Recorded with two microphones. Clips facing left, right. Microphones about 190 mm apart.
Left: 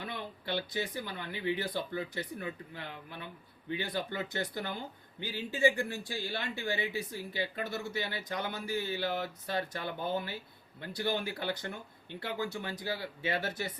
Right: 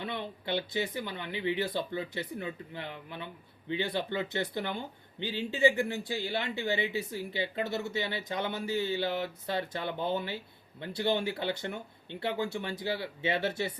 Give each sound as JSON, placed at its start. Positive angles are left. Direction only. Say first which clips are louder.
{"t": 0.0, "sound": "speech", "louder": "right 4 dB", "side_deg": -20}